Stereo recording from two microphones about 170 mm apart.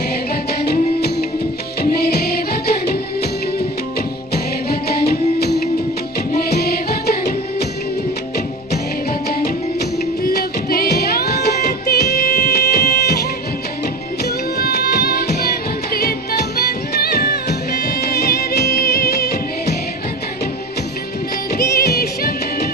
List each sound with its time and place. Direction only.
0.5 s music: 70° left (ahead or behind)
4.3 s music: 65° left (ahead or behind)
9.3 s music: 65° left (ahead or behind)
14.6 s music: 70° left (ahead or behind)
21.5 s music: 70° left (ahead or behind)